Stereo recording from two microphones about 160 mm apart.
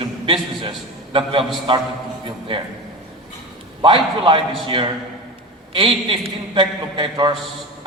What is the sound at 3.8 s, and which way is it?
A man's voice, 30° right (ahead or behind).